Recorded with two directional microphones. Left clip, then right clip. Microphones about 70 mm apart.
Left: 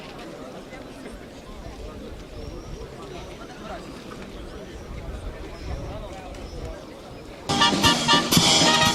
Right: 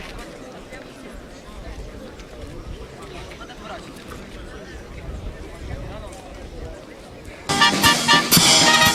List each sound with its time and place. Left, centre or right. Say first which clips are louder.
7.4 s music: right 3 dB; right